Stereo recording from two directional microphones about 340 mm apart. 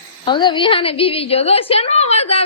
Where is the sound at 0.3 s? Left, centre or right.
Centre.